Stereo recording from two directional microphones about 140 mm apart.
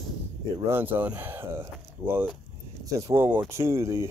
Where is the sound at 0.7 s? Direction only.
15° right (ahead or behind).